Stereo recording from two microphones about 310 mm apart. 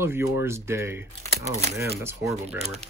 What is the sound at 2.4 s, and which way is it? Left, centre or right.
Speech, centre.